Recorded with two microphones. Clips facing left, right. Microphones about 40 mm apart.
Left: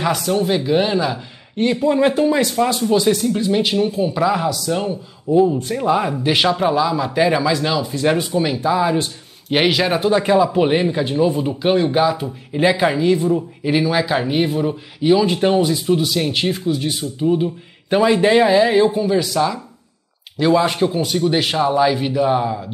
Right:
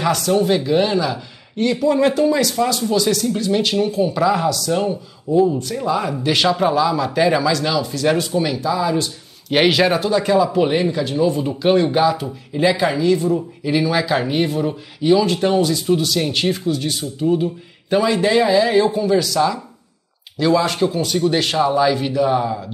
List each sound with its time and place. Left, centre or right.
0.0 s speech: centre
3.3 s speech: centre
5.6 s speech: left
8.5 s speech: left
9.5 s speech: centre
9.9 s speech: left
12.5 s speech: left
13.9 s speech: centre